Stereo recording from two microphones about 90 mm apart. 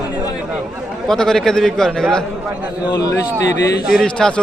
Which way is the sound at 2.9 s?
40° left (ahead or behind).